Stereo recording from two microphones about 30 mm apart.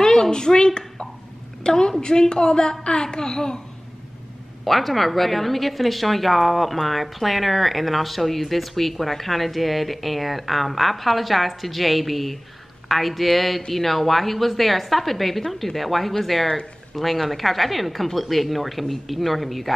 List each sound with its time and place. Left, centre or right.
0.0 s a woman's voice: left
4.6 s speech: centre